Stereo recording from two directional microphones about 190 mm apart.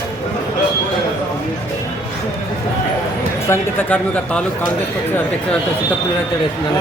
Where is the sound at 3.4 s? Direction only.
10° left (ahead or behind).